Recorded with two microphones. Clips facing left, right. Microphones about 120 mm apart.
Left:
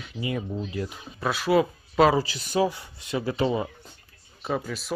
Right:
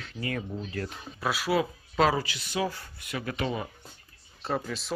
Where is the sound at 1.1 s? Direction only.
5° right (ahead or behind).